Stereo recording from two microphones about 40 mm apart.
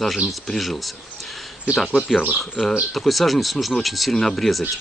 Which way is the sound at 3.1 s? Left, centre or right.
Centre.